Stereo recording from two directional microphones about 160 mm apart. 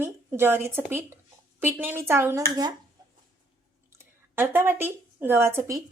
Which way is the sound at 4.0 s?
15° right (ahead or behind).